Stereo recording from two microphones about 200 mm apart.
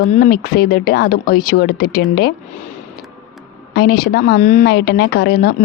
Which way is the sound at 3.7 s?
50° left (ahead or behind).